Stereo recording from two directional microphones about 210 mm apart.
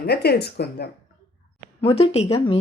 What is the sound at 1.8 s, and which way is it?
Speech, 25° left (ahead or behind).